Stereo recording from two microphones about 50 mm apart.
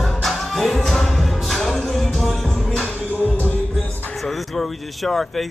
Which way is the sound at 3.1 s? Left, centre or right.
Left.